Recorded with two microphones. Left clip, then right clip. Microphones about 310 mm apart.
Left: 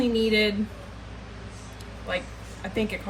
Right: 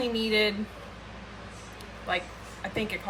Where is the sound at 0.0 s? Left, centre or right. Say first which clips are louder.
Left 3 dB; centre.